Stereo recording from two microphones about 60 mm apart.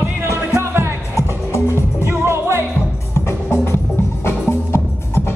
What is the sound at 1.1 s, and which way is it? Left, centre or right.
Music, left.